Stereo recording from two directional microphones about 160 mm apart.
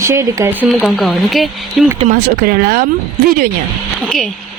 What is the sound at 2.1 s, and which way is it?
Speech, 65° right (ahead or behind).